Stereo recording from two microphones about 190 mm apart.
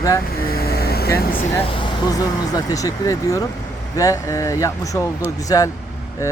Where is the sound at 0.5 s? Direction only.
55° left (ahead or behind).